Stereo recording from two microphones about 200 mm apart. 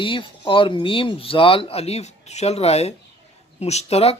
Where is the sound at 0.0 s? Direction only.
25° left (ahead or behind).